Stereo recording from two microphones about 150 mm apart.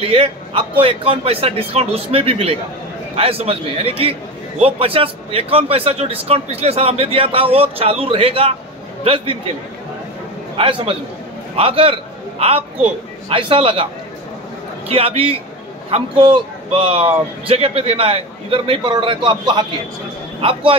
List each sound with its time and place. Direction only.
0.0 s a man's voice: 40° right (ahead or behind)
10.6 s a man's voice: 35° right (ahead or behind)
14.9 s a man's voice: 40° right (ahead or behind)